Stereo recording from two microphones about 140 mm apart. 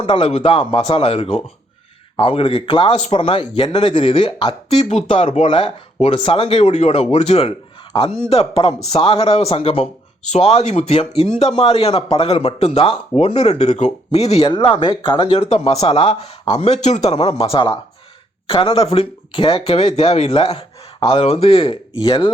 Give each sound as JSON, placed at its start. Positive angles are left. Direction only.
{"t": 0.0, "sound": "speech", "side_deg": 45}
{"t": 2.9, "sound": "speech", "side_deg": 45}
{"t": 4.7, "sound": "speech", "side_deg": 50}
{"t": 14.5, "sound": "speech", "side_deg": 35}
{"t": 22.0, "sound": "speech", "side_deg": 30}